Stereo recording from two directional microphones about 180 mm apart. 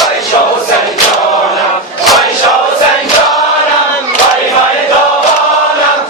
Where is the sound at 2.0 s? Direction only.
Centre (ahead or behind).